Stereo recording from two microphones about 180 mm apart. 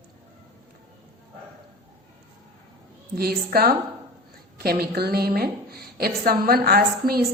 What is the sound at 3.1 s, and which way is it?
A woman's voice, 60° right (ahead or behind).